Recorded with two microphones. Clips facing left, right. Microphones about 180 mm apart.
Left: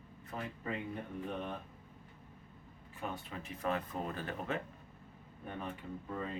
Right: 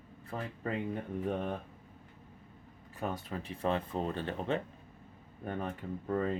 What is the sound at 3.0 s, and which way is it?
Speech, 40° right (ahead or behind).